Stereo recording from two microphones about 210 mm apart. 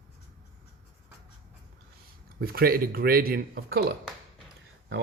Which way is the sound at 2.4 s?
45° right (ahead or behind).